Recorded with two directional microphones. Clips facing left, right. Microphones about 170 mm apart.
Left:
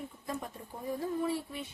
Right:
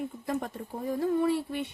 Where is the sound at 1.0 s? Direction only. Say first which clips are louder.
Right 8 dB; 70° right (ahead or behind).